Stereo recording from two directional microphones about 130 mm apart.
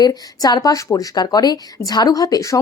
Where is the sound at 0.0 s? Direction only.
30° left (ahead or behind).